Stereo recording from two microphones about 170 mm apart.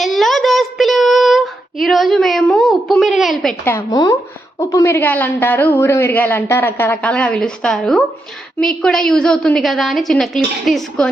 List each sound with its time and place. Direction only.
0.0 s child singing: centre (ahead or behind)
3.6 s a woman's voice: 15° left (ahead or behind)
3.9 s a woman's voice: 25° left (ahead or behind); by 11.1 s centre (ahead or behind)